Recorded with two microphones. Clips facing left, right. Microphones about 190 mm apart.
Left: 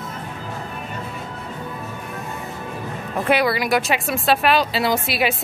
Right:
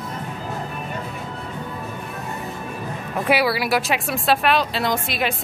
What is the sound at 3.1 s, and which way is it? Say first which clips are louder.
Speech: left 1 dB; 5° right (ahead or behind).